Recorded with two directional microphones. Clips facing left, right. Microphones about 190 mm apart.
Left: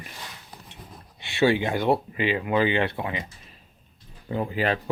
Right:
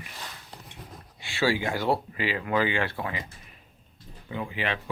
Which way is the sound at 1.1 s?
20° left (ahead or behind).